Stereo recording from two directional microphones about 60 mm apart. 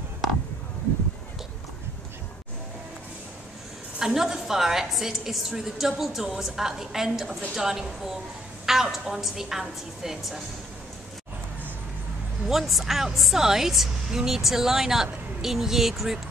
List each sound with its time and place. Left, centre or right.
4.0 s a woman's voice: centre
12.4 s a woman's voice: centre